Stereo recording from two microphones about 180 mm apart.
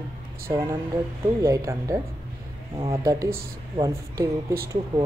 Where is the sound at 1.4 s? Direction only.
15° right (ahead or behind).